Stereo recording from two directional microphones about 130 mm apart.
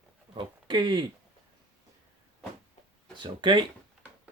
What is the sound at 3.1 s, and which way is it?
Speech, 35° right (ahead or behind).